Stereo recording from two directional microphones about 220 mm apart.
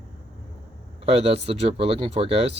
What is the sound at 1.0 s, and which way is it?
Speech, 25° right (ahead or behind).